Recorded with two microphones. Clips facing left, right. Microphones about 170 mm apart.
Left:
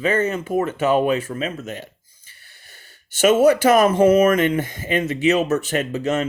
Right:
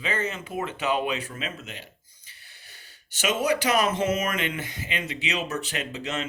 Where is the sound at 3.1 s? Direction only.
50° left (ahead or behind).